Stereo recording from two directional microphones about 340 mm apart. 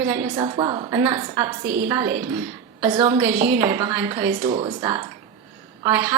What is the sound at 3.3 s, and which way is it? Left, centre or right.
Speech, right.